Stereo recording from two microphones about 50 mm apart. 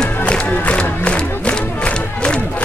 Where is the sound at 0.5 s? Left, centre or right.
Left.